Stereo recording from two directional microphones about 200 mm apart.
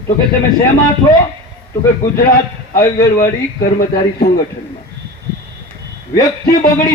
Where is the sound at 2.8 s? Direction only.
15° left (ahead or behind).